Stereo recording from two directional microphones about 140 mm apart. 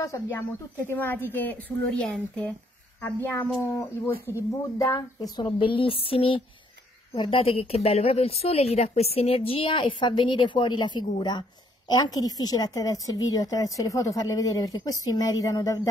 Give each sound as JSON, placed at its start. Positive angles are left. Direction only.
{"t": 0.0, "sound": "a woman's voice", "side_deg": 20}